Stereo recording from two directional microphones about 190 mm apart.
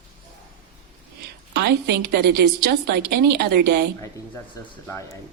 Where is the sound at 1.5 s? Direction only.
60° right (ahead or behind).